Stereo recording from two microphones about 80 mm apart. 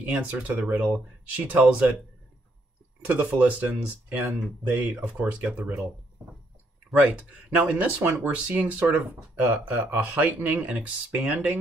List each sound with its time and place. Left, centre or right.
0.1 s speech: centre
3.1 s speech: centre
7.0 s speech: centre
8.0 s speech: right
8.3 s speech: centre